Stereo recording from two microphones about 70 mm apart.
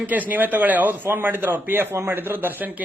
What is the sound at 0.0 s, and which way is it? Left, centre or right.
A man's voice, right.